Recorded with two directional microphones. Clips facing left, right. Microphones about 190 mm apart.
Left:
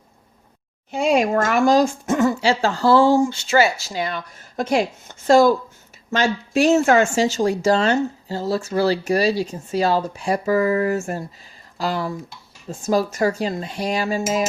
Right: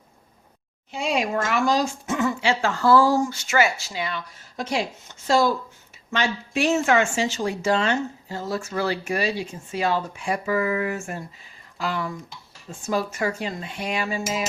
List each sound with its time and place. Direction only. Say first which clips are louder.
0.9 s a woman's voice: left 7 dB; 50° left (ahead or behind)